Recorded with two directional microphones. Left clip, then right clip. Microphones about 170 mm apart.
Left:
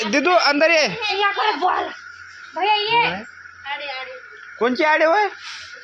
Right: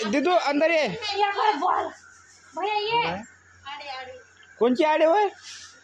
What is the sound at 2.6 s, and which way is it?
Speech, 35° left (ahead or behind).